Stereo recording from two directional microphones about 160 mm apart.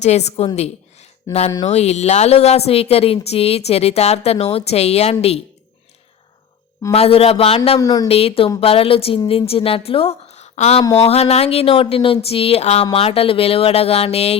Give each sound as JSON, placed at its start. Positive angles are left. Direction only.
{"t": 0.0, "sound": "a woman's voice", "side_deg": 45}
{"t": 6.9, "sound": "speech", "side_deg": 40}
{"t": 7.8, "sound": "a woman's voice", "side_deg": 25}
{"t": 8.0, "sound": "speech", "side_deg": 40}